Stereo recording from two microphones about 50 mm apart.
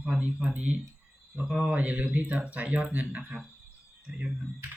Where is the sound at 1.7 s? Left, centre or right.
Right.